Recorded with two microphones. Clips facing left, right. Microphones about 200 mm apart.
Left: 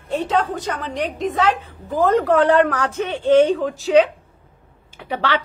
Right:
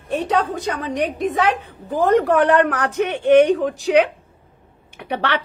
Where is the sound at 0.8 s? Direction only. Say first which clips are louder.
Right 3 dB; 15° right (ahead or behind).